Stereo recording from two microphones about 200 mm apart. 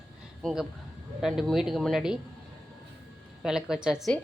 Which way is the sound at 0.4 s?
Centre (ahead or behind).